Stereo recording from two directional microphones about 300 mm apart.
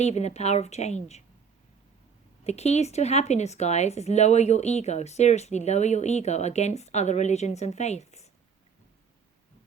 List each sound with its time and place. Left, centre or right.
0.0 s speech: left
2.4 s speech: left